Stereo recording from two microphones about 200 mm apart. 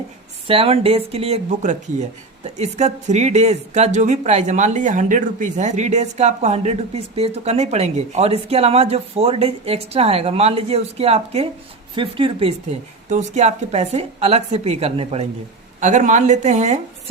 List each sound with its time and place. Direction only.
0.4 s speech: 30° right (ahead or behind)